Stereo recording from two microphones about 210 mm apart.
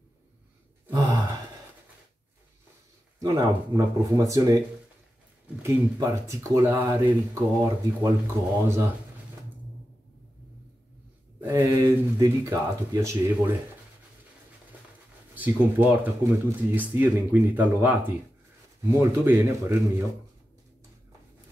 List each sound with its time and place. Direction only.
0.8 s a sound: 15° right (ahead or behind)
3.2 s speech: 15° right (ahead or behind)
5.6 s speech: 10° right (ahead or behind)
11.4 s speech: 15° right (ahead or behind)
15.3 s speech: 10° right (ahead or behind)